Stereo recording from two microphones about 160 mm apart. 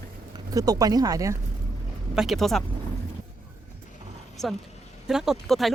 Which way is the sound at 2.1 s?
Centre (ahead or behind).